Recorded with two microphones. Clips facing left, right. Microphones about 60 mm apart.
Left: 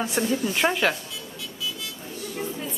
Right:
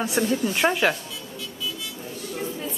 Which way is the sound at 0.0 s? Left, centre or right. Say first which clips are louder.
Right 1 dB; centre.